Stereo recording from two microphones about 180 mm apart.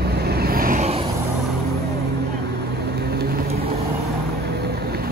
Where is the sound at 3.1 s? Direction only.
60° right (ahead or behind).